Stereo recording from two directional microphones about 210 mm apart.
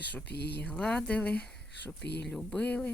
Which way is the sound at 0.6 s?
5° left (ahead or behind).